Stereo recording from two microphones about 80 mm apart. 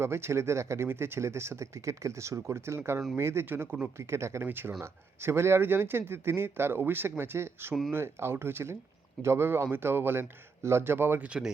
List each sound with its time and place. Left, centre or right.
0.0 s speech: right
11.3 s speech: centre